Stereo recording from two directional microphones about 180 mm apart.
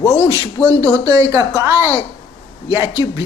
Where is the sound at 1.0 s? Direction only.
20° right (ahead or behind).